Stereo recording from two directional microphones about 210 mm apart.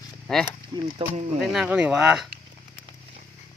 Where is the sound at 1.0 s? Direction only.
25° right (ahead or behind).